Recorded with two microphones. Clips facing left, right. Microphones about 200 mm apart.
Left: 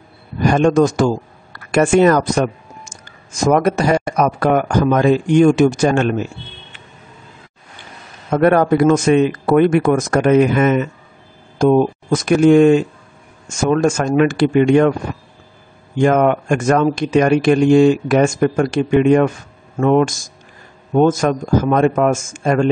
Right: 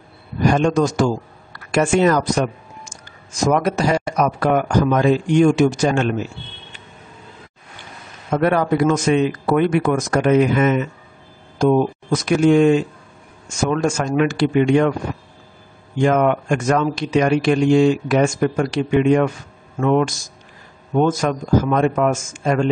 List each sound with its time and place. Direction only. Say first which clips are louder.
0.5 s speech: left 4 dB; 55° left (ahead or behind)
8.3 s speech: left 4 dB; 50° left (ahead or behind)
16.0 s speech: left 3 dB; 50° left (ahead or behind)